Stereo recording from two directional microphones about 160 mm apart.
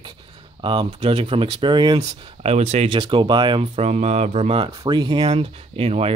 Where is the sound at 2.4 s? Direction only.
40° right (ahead or behind).